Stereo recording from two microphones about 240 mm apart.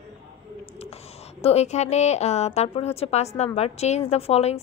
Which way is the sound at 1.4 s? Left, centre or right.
Left.